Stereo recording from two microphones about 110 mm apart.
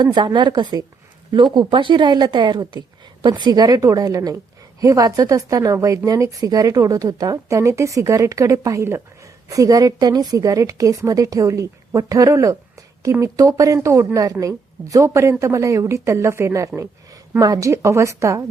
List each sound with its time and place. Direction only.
0.0 s a woman's voice: 40° right (ahead or behind)